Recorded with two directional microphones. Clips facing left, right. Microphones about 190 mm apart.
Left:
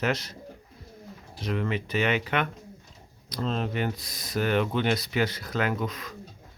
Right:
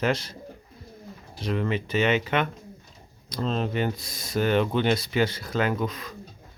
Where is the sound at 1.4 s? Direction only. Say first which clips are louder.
Right 2 dB; 30° right (ahead or behind).